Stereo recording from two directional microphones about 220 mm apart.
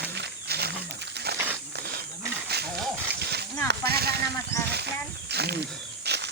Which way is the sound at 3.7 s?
45° right (ahead or behind).